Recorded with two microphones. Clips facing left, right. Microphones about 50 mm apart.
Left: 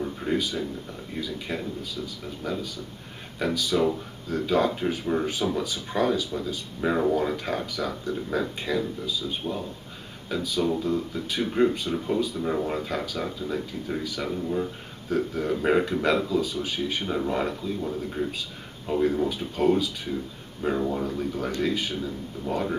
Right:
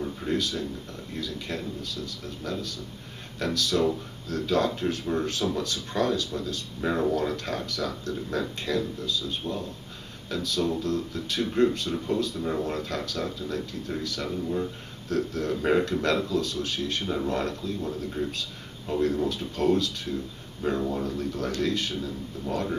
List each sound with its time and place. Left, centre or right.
0.0 s speech: centre